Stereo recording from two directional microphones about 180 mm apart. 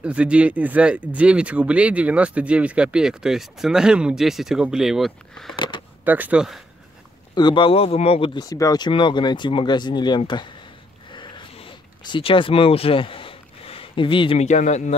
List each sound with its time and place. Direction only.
0.0 s speech: 5° right (ahead or behind)
6.0 s speech: 10° right (ahead or behind)
7.3 s speech: 25° left (ahead or behind)
11.1 s a sound: 30° left (ahead or behind)